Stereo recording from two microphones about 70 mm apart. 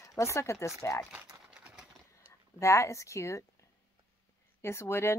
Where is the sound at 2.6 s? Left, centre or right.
Left.